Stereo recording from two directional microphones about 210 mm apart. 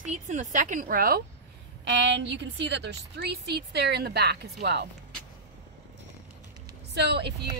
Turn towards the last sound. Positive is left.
turn(degrees=-50)  # may be behind; listen again after turning